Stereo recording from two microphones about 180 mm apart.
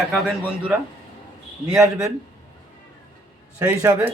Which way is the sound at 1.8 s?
15° right (ahead or behind).